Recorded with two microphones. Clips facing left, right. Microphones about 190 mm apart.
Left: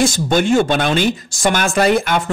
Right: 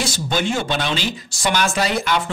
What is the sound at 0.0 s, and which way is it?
Speech, 50° left (ahead or behind).